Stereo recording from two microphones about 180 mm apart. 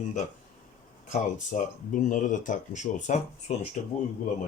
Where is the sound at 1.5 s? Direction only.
45° left (ahead or behind).